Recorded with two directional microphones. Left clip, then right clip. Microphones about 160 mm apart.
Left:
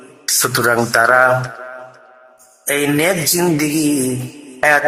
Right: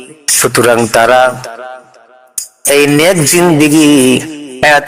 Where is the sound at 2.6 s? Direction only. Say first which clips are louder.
Right 8 dB; 30° right (ahead or behind).